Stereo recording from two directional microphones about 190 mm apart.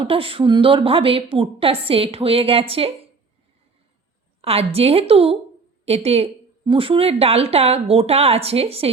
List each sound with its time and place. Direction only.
0.0 s a woman's voice: 30° right (ahead or behind)
4.4 s a woman's voice: 30° right (ahead or behind)